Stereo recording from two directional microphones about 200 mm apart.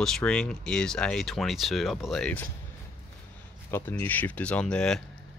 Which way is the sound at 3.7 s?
10° left (ahead or behind).